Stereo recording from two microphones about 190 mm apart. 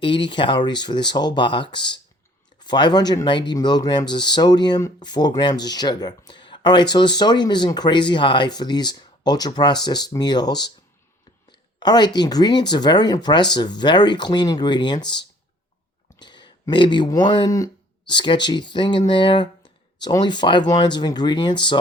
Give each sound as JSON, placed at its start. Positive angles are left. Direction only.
{"t": 0.0, "sound": "speech", "side_deg": 25}